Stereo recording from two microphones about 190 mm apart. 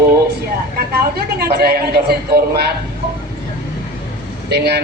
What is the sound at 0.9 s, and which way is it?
A woman's voice, 55° right (ahead or behind).